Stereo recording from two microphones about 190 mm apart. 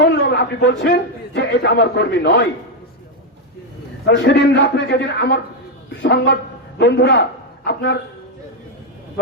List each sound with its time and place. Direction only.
0.0 s a man's voice: 65° left (ahead or behind)
4.0 s a man's voice: 70° left (ahead or behind)